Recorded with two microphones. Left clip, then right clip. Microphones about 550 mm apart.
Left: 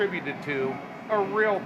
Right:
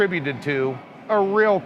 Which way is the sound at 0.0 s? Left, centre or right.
Right.